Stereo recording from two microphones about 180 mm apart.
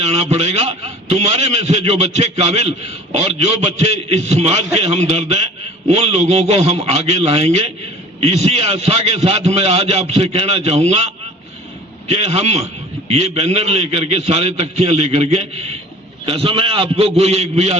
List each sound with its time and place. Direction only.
0.0 s a man's voice: 35° right (ahead or behind)
12.0 s a man's voice: 35° right (ahead or behind)